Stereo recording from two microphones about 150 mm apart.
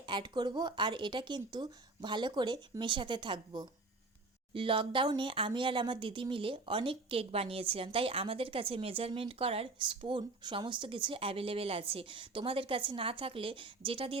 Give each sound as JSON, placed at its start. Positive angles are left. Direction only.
{"t": 0.0, "sound": "speech", "side_deg": -30}